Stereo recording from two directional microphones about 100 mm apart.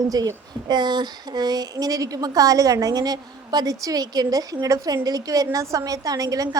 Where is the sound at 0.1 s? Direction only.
40° right (ahead or behind).